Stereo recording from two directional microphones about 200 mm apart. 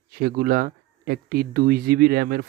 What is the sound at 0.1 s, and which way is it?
Speech, 50° right (ahead or behind).